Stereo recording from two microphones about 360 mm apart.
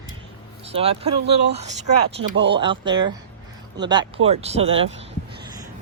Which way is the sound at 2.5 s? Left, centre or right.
Centre.